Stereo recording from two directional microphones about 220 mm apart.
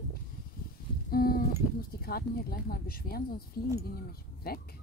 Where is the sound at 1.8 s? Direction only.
45° left (ahead or behind).